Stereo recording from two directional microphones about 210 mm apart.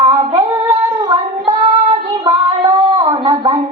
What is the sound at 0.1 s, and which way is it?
Female singing, 25° right (ahead or behind).